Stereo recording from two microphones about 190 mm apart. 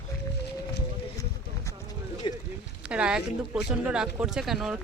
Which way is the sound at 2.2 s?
25° left (ahead or behind).